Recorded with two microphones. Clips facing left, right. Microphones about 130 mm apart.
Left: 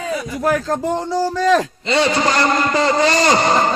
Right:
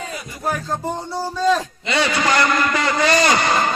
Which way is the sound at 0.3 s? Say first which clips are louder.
Left 5 dB; 90° left.